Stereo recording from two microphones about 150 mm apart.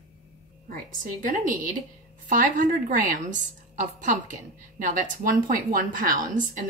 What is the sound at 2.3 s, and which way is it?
Speech, 60° right (ahead or behind).